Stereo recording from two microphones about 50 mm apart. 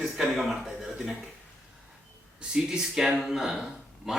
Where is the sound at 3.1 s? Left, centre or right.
Centre.